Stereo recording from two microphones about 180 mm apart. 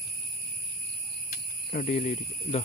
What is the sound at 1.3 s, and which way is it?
Speech, 50° left (ahead or behind).